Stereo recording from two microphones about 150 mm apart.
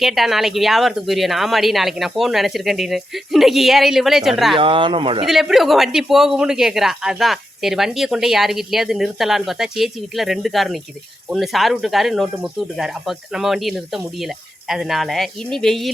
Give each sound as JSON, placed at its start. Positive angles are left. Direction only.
{"t": 0.0, "sound": "a man's voice", "side_deg": 0}
{"t": 4.5, "sound": "speech", "side_deg": -35}
{"t": 5.2, "sound": "a man's voice", "side_deg": 0}